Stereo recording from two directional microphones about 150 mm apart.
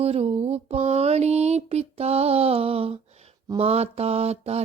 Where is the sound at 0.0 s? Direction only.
40° right (ahead or behind).